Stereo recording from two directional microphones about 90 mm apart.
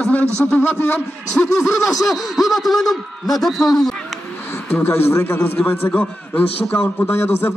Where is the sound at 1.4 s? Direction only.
35° left (ahead or behind).